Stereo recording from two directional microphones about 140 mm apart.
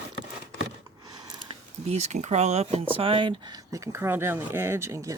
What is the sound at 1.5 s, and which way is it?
Speech, 50° right (ahead or behind).